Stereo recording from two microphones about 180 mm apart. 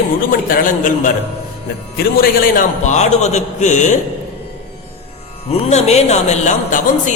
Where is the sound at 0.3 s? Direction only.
50° left (ahead or behind).